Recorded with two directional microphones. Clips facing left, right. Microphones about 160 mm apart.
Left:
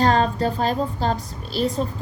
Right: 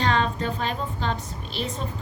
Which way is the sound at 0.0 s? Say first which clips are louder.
Left 5 dB; 40° left (ahead or behind).